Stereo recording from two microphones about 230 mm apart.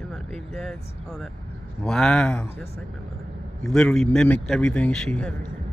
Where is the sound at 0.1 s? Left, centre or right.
Centre.